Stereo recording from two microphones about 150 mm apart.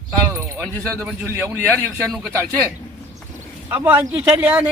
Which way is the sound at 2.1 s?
Centre (ahead or behind).